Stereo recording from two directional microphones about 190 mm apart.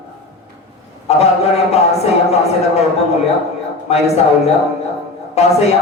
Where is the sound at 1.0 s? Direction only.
35° left (ahead or behind).